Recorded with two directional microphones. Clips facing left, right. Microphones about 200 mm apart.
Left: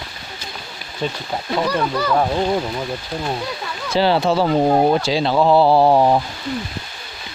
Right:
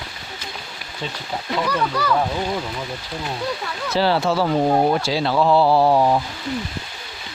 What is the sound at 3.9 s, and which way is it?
Speech, 20° left (ahead or behind).